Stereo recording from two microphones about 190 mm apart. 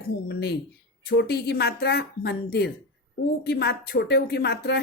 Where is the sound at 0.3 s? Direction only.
55° left (ahead or behind).